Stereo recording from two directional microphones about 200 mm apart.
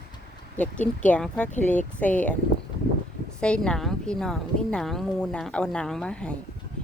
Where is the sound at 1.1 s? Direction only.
5° left (ahead or behind).